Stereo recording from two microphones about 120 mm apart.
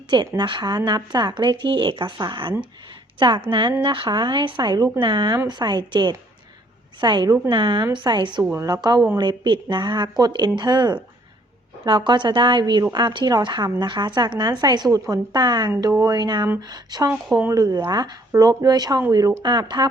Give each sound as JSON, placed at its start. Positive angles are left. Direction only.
{"t": 0.3, "sound": "a woman's voice", "side_deg": -40}